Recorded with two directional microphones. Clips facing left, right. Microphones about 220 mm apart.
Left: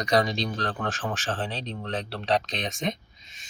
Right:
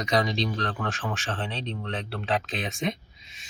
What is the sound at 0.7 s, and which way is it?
Speech, 30° left (ahead or behind).